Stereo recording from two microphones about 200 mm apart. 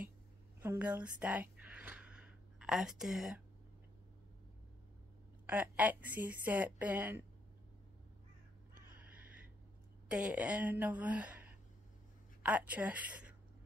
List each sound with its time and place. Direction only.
0.6 s a sound: 10° right (ahead or behind)
5.5 s a woman's voice: 5° right (ahead or behind)
10.0 s a woman's voice: 5° right (ahead or behind)